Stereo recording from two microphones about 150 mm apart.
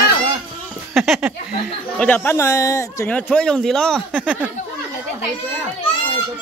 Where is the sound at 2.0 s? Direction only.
10° left (ahead or behind).